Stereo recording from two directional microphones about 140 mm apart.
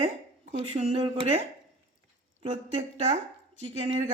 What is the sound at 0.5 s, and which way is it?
Speech, 50° right (ahead or behind).